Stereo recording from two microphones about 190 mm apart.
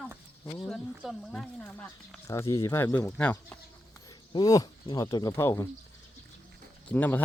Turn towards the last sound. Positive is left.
turn(degrees=10)  # may be behind; listen again after turning